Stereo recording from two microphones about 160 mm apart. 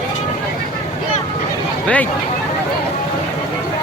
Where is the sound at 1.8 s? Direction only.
10° left (ahead or behind).